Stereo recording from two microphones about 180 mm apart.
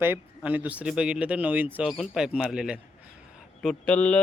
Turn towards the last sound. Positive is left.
turn(degrees=5)  # may be behind; listen again after turning